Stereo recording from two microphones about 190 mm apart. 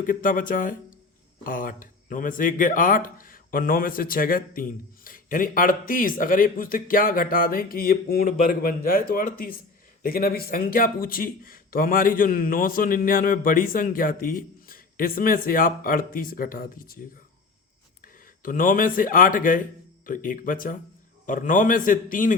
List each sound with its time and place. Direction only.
0.0 s speech: 45° left (ahead or behind)
18.0 s speech: 45° left (ahead or behind)